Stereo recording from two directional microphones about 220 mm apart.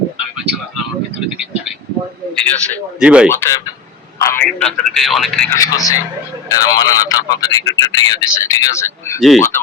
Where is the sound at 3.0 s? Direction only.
5° right (ahead or behind).